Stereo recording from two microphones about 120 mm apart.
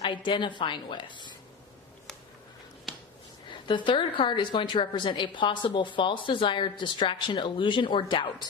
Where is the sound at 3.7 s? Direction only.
40° left (ahead or behind).